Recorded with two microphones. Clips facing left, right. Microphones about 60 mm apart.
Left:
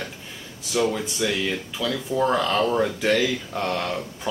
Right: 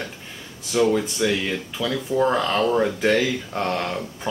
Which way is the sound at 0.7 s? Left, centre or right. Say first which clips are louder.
Right 4 dB; centre.